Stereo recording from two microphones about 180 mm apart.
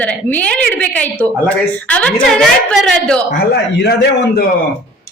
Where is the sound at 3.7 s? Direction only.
70° left (ahead or behind).